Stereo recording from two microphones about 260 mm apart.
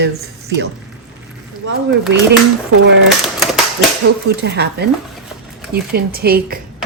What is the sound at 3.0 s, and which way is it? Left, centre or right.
Typewriter, centre.